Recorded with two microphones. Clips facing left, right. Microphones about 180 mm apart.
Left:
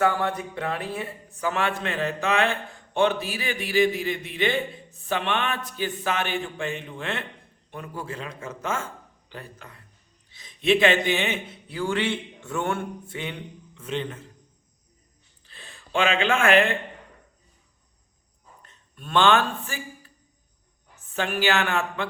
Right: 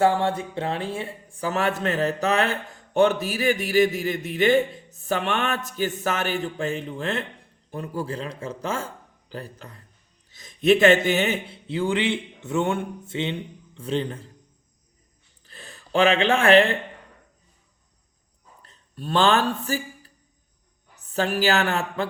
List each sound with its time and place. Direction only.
0.0 s speech: 30° right (ahead or behind)
13.7 s speech: 35° right (ahead or behind)
15.4 s speech: 40° right (ahead or behind)
18.6 s speech: 35° right (ahead or behind)
21.1 s speech: 35° right (ahead or behind)